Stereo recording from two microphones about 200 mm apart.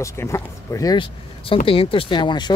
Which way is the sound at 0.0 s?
15° left (ahead or behind).